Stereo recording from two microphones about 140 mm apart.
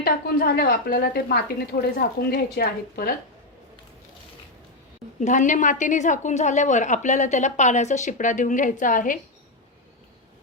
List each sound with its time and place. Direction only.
0.0 s a woman's voice: 90° left
5.2 s a woman's voice: 60° left (ahead or behind)